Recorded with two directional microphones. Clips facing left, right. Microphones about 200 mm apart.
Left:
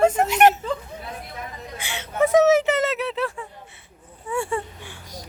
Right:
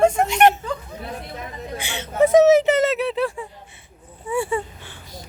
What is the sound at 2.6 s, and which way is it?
Squeak, 20° right (ahead or behind).